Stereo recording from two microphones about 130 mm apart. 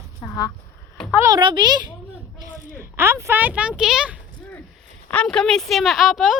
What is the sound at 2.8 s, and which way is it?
Speech, 20° right (ahead or behind).